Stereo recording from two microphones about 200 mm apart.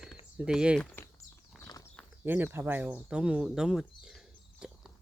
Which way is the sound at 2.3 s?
10° right (ahead or behind).